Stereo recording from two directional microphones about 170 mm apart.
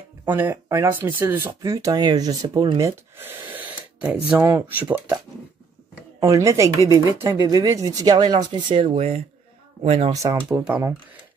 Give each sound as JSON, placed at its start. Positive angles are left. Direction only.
{"t": 0.3, "sound": "speech", "side_deg": -10}
{"t": 3.2, "sound": "speech", "side_deg": -10}
{"t": 10.1, "sound": "speech", "side_deg": -15}